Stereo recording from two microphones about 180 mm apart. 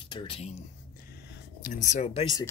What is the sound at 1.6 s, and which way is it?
Speech, 45° left (ahead or behind).